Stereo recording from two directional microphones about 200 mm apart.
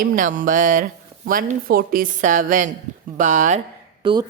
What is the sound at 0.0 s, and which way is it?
Speech, 40° right (ahead or behind).